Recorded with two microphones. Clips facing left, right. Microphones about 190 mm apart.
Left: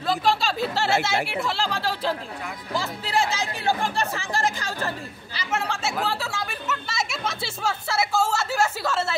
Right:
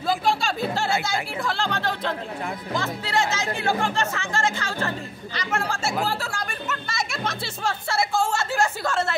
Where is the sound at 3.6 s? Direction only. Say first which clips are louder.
Even; 15° left (ahead or behind).